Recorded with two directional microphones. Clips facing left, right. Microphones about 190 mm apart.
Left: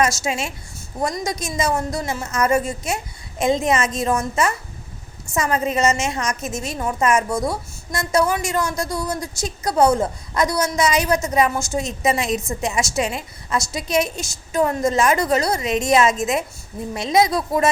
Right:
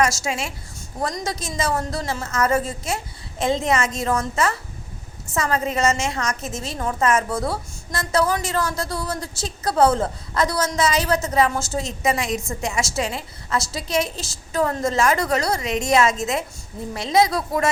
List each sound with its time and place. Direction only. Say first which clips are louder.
0.0 s a woman's voice: left 1 dB; 20° left (ahead or behind)